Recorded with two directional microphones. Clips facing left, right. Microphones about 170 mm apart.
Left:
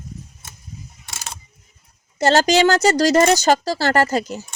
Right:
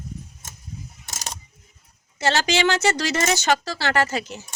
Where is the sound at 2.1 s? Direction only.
40° left (ahead or behind).